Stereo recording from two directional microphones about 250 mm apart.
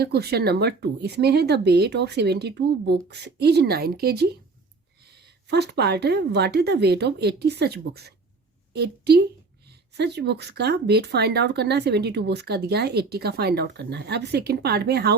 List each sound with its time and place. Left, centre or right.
0.0 s speech: right
5.5 s a woman's voice: right